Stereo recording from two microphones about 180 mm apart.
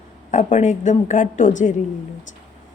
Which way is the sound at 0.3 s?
40° left (ahead or behind).